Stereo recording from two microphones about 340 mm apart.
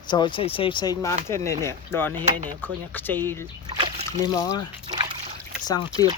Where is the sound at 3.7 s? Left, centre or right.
Centre.